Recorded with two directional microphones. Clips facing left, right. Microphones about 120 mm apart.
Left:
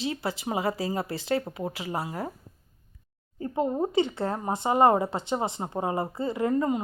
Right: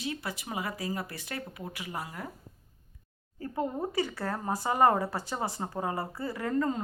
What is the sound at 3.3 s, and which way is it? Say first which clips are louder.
Speech: left 6 dB; 20° left (ahead or behind).